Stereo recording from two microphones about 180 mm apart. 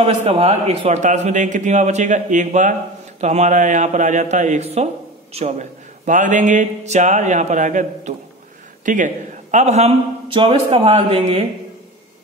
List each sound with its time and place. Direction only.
0.0 s a man's voice: 35° right (ahead or behind)